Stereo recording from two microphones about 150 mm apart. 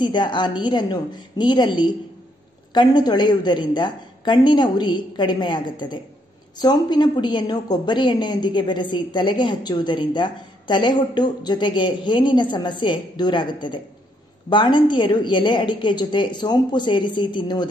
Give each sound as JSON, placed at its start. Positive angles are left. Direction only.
{"t": 0.0, "sound": "a woman's voice", "side_deg": 30}